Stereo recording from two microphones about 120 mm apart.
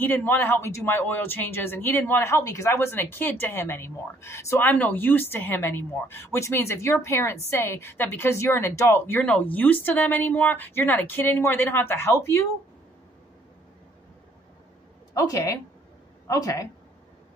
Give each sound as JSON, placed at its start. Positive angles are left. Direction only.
{"t": 0.0, "sound": "speech", "side_deg": 15}
{"t": 15.1, "sound": "speech", "side_deg": 30}